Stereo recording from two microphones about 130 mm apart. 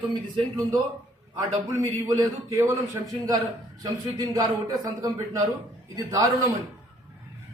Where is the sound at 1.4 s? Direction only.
30° right (ahead or behind).